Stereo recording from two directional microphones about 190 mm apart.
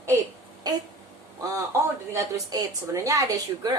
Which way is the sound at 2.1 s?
20° right (ahead or behind).